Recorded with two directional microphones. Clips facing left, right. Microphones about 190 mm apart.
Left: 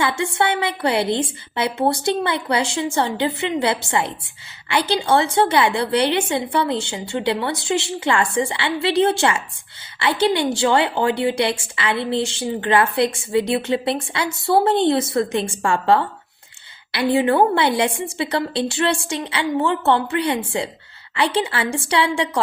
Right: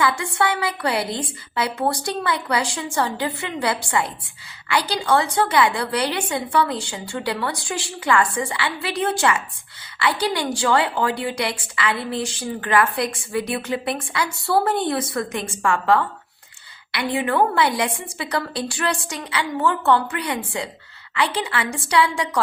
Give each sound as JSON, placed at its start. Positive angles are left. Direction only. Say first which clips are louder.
{"t": 0.0, "sound": "a woman's voice", "louder": "left 1 dB", "side_deg": 25}